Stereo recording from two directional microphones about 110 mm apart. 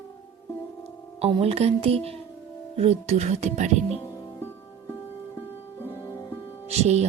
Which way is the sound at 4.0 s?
30° left (ahead or behind).